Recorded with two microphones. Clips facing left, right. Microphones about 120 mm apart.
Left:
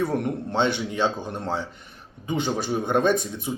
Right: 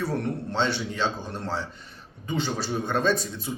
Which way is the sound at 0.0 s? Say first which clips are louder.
Left 3 dB; 15° left (ahead or behind).